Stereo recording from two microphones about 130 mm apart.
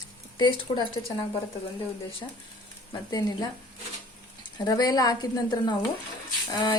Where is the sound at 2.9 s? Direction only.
30° left (ahead or behind).